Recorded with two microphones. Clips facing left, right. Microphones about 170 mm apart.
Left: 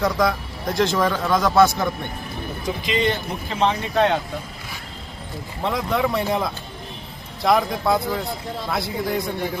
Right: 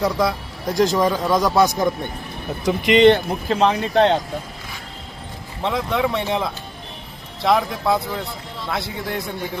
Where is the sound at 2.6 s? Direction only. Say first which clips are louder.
Right 10 dB; 75° right (ahead or behind).